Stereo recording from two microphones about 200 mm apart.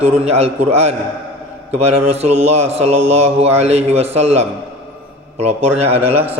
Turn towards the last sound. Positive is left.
turn(degrees=-10)  # may be behind; listen again after turning